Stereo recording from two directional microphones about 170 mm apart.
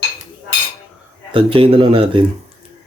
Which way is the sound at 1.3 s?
30° right (ahead or behind).